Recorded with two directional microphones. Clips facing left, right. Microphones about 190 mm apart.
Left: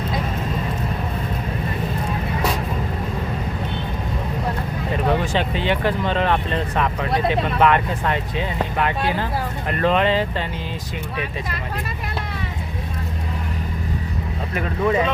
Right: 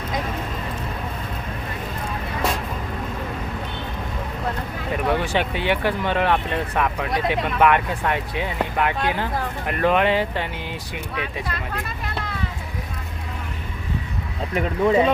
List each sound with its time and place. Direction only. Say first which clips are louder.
5.3 s speech: left 1 dB; 15° right (ahead or behind)
14.5 s speech: right 2 dB; 25° right (ahead or behind)